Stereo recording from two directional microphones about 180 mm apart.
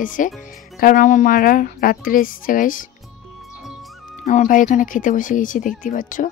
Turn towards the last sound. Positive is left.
turn(degrees=45)  # may be behind; listen again after turning